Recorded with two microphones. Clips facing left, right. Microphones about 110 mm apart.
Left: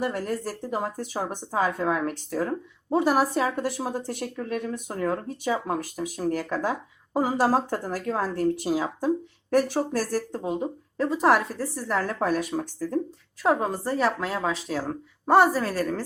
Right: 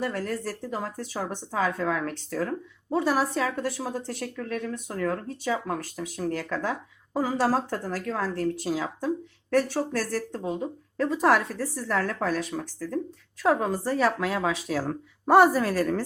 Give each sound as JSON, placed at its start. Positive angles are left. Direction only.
{"t": 0.0, "sound": "a woman's voice", "side_deg": 15}
{"t": 12.0, "sound": "speech", "side_deg": 15}
{"t": 13.4, "sound": "a woman's voice", "side_deg": 5}